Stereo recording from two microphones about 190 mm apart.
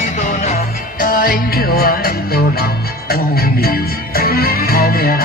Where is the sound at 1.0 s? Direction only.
50° left (ahead or behind).